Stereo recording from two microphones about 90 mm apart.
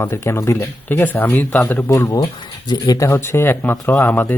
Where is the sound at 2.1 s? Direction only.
45° left (ahead or behind).